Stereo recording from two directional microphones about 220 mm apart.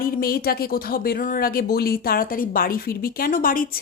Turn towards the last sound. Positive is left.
turn(degrees=40)  # may be behind; listen again after turning